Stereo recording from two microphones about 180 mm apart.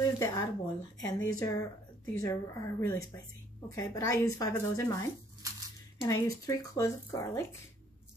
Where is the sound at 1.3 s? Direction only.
20° left (ahead or behind).